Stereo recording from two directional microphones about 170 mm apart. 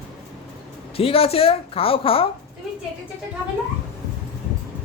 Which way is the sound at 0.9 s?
35° left (ahead or behind).